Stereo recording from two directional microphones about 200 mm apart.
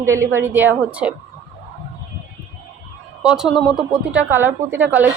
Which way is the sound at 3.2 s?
5° right (ahead or behind).